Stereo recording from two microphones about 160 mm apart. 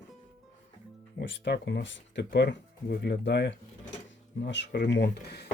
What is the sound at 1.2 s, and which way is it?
Speech, 90° left.